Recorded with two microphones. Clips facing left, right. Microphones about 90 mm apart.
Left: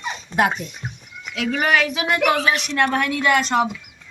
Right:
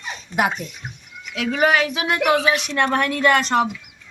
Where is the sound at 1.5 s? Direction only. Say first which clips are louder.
Right 2 dB; 20° right (ahead or behind); by 3.6 s 40° right (ahead or behind).